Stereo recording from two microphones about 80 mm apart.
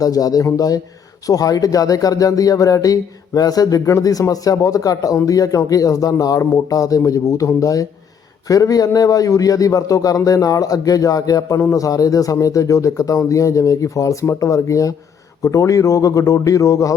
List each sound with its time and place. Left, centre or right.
0.0 s speech: left